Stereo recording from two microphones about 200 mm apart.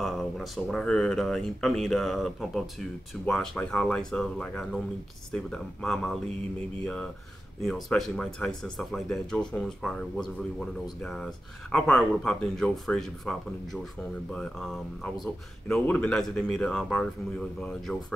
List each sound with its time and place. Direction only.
0.0 s speech: centre (ahead or behind)
7.6 s speech: centre (ahead or behind)